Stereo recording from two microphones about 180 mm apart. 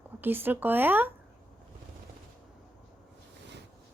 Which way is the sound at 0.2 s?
10° right (ahead or behind).